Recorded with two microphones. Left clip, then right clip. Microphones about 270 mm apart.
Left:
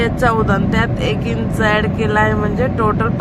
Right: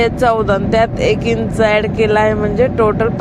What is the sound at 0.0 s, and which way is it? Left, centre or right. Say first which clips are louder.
Speech: right 3 dB; centre.